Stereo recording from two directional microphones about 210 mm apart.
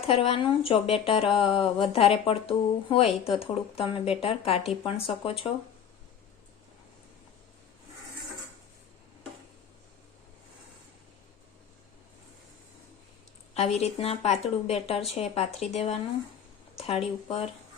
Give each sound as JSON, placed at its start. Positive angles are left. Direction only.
{"t": 0.0, "sound": "speech", "side_deg": 25}
{"t": 13.5, "sound": "speech", "side_deg": 30}